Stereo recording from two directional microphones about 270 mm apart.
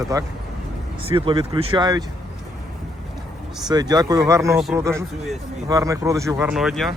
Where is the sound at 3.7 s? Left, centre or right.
Centre.